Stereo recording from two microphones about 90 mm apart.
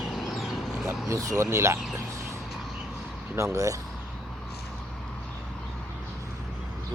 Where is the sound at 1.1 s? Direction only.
35° right (ahead or behind).